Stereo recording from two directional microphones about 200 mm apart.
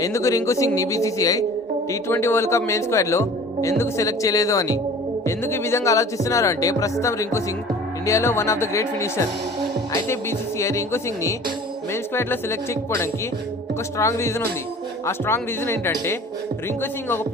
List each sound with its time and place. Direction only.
0.0 s speech: 15° left (ahead or behind)